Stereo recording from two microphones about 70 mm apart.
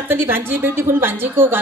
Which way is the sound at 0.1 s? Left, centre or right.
Right.